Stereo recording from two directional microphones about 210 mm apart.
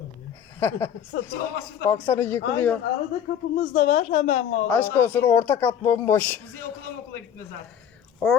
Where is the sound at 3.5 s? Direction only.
35° left (ahead or behind).